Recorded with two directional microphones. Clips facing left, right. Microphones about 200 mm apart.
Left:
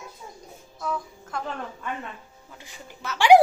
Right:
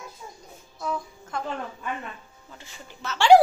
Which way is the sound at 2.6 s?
10° left (ahead or behind).